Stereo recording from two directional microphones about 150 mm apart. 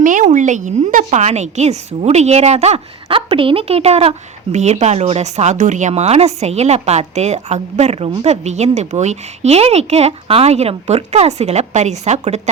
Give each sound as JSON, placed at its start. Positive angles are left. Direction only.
{"t": 0.0, "sound": "a woman's voice", "side_deg": -60}